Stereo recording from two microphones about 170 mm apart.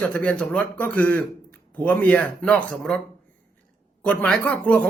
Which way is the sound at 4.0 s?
5° left (ahead or behind).